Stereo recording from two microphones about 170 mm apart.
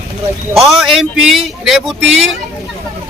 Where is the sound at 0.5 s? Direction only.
Centre (ahead or behind).